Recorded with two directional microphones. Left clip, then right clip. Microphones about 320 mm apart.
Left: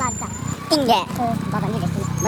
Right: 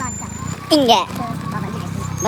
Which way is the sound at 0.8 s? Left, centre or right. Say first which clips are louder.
Right 4 dB; centre.